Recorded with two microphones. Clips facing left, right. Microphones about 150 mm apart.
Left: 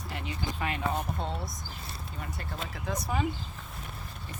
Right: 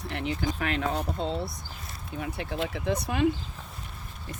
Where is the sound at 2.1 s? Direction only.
70° right (ahead or behind).